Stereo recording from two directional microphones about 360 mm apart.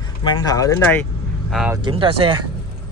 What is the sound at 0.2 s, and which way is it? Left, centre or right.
Speech, centre.